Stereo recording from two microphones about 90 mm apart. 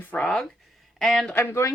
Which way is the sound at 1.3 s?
30° left (ahead or behind).